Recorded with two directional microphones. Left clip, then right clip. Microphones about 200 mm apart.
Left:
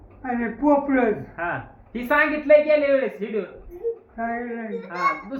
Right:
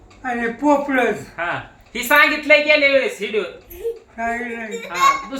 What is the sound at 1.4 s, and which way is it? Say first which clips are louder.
Speech: right 4 dB; 10° left (ahead or behind).